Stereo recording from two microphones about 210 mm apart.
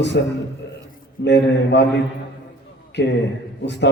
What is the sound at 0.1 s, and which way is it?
A man's voice, 50° left (ahead or behind).